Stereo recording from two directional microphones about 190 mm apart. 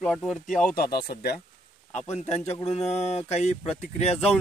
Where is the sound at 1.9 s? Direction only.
35° left (ahead or behind).